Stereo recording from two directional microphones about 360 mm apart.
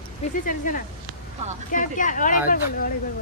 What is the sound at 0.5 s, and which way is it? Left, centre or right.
Speech, left.